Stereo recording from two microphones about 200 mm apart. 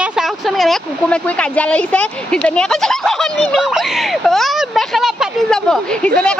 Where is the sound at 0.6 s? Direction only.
5° left (ahead or behind).